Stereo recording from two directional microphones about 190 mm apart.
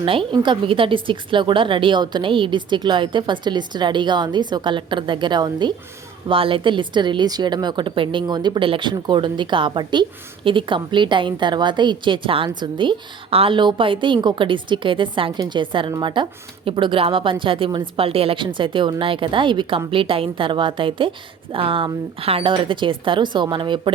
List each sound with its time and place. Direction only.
0.0 s a woman's voice: 25° right (ahead or behind)